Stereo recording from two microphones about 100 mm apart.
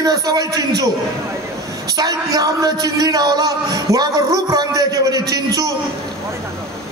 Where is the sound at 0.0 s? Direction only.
40° right (ahead or behind).